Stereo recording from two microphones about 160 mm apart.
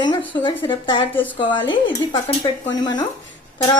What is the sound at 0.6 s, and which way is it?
Speech, 30° left (ahead or behind).